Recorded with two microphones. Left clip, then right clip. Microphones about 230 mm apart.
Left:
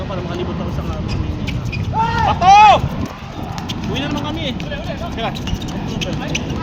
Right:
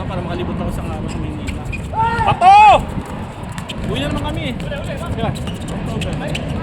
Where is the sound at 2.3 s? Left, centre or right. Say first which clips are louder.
Right 1 dB; right.